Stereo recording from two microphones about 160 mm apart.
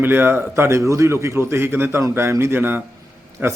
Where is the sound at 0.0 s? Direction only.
15° right (ahead or behind).